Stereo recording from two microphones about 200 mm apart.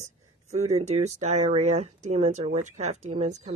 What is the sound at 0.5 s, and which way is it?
Speech, 35° right (ahead or behind).